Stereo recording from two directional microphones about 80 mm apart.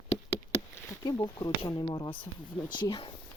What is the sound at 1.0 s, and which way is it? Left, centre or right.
Speech, left.